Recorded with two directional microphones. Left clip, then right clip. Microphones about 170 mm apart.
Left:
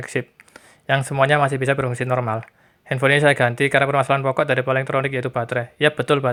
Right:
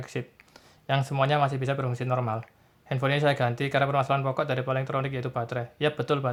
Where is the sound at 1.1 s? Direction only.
30° left (ahead or behind).